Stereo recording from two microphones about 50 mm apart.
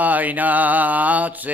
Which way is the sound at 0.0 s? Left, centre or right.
Right.